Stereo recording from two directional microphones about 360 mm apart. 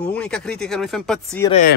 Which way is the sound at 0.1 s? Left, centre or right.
Centre.